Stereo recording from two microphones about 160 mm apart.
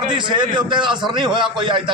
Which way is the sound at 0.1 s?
30° right (ahead or behind).